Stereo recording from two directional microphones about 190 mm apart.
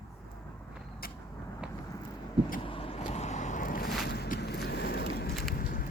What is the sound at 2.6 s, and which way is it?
Vehicle, 30° left (ahead or behind).